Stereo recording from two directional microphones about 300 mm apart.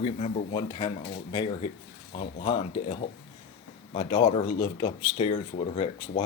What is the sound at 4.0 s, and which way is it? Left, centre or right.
Speech, centre.